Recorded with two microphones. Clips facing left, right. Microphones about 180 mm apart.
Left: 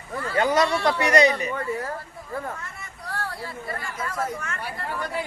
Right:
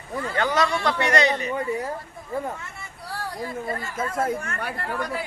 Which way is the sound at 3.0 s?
10° right (ahead or behind).